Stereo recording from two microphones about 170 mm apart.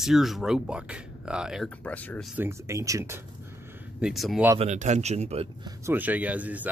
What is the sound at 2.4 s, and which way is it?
Speech, 15° right (ahead or behind).